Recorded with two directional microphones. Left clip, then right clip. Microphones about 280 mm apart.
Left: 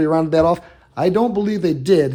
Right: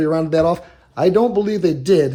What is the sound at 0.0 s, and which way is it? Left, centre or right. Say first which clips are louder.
A man's voice: left 1 dB; left.